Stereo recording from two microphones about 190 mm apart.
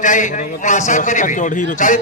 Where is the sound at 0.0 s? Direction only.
40° left (ahead or behind).